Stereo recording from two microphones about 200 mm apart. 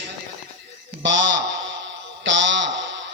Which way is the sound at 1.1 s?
60° right (ahead or behind).